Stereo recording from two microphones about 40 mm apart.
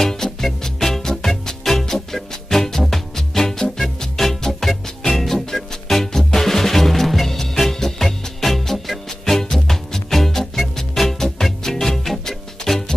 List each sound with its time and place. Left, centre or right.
0.0 s music: centre